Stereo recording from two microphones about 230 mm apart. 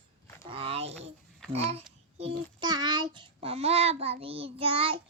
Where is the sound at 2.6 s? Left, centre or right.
Centre.